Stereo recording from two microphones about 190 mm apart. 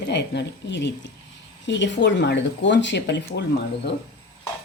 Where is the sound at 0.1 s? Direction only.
65° left (ahead or behind).